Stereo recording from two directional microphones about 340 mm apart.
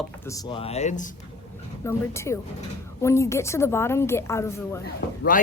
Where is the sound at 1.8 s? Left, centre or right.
Centre.